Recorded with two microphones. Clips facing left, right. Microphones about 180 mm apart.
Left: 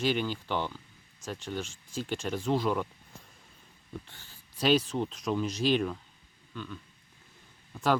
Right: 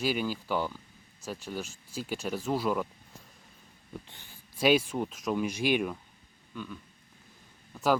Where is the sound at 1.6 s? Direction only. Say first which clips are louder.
Even; 40° right (ahead or behind).